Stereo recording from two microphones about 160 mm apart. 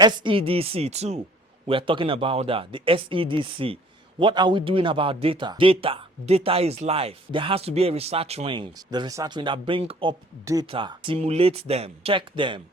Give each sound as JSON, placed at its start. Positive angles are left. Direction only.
{"t": 0.0, "sound": "speech", "side_deg": -30}
{"t": 10.4, "sound": "speech", "side_deg": -20}
{"t": 10.7, "sound": "speech", "side_deg": -30}